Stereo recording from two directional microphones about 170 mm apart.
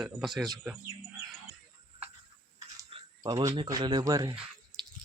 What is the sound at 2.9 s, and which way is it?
Speech, 25° right (ahead or behind).